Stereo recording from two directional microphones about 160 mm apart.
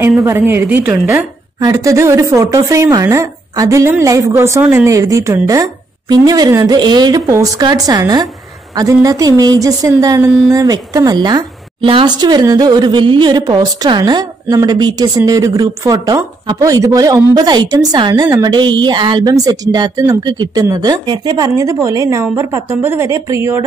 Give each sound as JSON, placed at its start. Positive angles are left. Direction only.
{"t": 0.2, "sound": "a woman's voice", "side_deg": -15}